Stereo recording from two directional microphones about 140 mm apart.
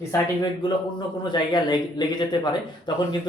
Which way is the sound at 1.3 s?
30° left (ahead or behind).